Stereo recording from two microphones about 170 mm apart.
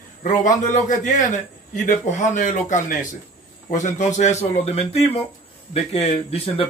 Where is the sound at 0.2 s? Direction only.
50° left (ahead or behind).